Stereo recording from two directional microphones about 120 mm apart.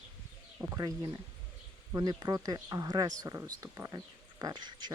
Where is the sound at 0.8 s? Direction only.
30° right (ahead or behind).